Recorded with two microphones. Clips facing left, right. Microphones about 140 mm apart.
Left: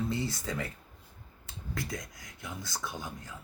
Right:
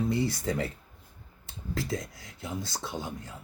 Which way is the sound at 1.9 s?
30° right (ahead or behind).